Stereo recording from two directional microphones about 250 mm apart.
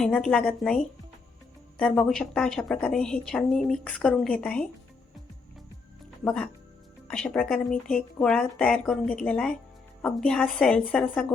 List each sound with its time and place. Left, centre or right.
0.0 s a woman's voice: centre
6.2 s a woman's voice: centre